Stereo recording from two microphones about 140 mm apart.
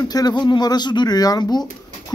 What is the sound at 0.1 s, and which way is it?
A man's voice, 30° left (ahead or behind).